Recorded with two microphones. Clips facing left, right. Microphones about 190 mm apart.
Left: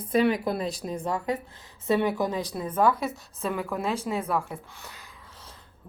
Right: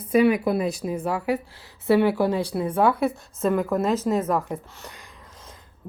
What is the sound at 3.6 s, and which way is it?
Speech, 40° right (ahead or behind).